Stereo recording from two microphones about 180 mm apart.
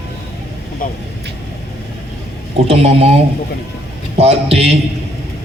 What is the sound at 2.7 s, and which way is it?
A man's voice, 35° right (ahead or behind).